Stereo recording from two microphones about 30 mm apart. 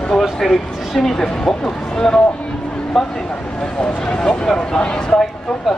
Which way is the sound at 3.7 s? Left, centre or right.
Left.